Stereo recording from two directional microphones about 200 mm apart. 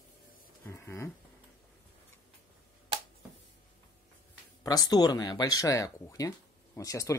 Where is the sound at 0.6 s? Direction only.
10° left (ahead or behind).